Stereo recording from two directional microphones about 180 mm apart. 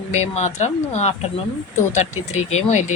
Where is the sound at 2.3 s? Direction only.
40° left (ahead or behind).